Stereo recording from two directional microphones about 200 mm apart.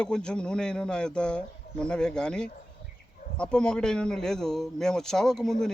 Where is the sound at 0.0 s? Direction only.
5° left (ahead or behind).